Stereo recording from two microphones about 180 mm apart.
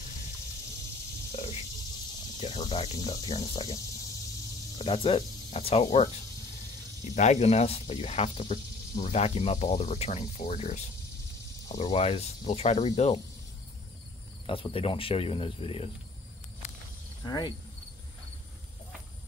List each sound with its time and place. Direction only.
1.3 s snake: 35° left (ahead or behind)
2.4 s speech: 25° left (ahead or behind)
7.2 s speech: 40° left (ahead or behind)
14.4 s speech: 30° left (ahead or behind)
17.2 s speech: 20° left (ahead or behind)